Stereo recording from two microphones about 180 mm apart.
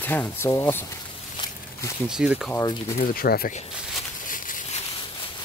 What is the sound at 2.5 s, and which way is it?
Speech, 20° left (ahead or behind).